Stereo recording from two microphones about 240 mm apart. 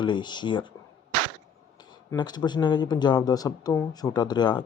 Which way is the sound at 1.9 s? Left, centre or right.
Centre.